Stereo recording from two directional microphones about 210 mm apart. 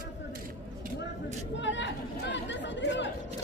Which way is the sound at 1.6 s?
60° left (ahead or behind).